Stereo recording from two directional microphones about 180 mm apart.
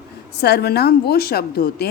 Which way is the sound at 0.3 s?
65° left (ahead or behind).